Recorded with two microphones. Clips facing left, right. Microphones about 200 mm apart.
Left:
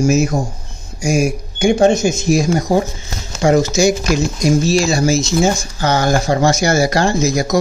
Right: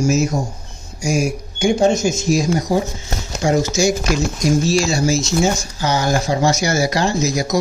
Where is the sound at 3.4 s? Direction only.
60° left (ahead or behind).